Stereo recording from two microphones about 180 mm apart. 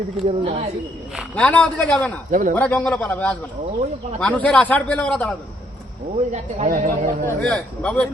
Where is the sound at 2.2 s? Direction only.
45° right (ahead or behind).